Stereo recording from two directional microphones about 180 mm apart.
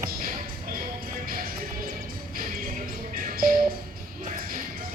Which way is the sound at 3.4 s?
55° right (ahead or behind).